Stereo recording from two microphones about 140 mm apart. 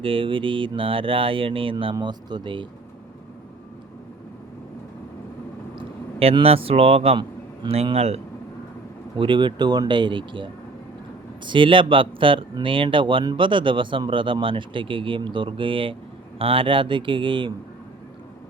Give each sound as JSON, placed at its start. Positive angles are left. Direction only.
{"t": 0.0, "sound": "speech", "side_deg": -40}
{"t": 6.1, "sound": "speech", "side_deg": -45}
{"t": 9.1, "sound": "speech", "side_deg": -35}